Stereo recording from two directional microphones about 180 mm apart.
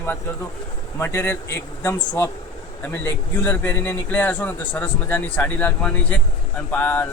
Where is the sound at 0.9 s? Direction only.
10° left (ahead or behind).